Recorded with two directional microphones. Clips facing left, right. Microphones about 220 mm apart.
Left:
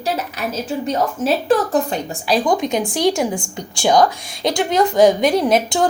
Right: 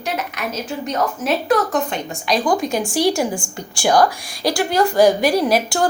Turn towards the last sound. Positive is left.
turn(degrees=20)  # may be behind; listen again after turning